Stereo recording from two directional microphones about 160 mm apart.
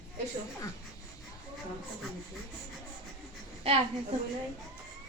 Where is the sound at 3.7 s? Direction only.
40° right (ahead or behind).